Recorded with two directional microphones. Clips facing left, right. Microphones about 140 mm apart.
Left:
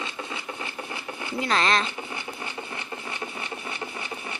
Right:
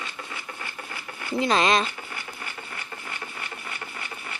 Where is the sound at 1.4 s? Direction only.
15° right (ahead or behind).